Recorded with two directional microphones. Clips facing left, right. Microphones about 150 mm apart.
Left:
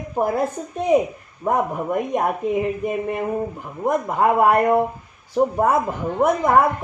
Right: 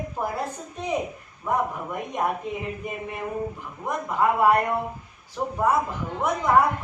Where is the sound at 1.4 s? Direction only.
55° left (ahead or behind).